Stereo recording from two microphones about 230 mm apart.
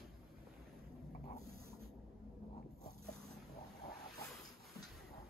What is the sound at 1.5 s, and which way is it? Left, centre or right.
Writing, right.